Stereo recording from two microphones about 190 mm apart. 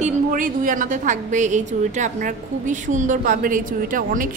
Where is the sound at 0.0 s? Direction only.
45° right (ahead or behind).